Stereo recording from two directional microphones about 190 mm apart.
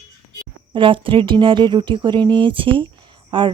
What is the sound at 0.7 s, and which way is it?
Speech, 25° right (ahead or behind).